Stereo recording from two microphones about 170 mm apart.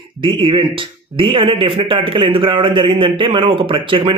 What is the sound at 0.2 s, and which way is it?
Speech, 30° right (ahead or behind).